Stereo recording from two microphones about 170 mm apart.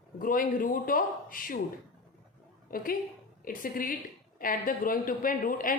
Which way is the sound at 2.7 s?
60° left (ahead or behind).